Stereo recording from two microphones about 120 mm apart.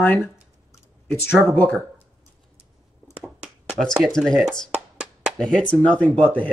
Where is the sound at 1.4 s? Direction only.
15° left (ahead or behind).